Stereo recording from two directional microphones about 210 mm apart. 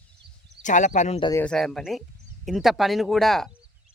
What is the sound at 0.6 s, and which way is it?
Speech, 35° left (ahead or behind).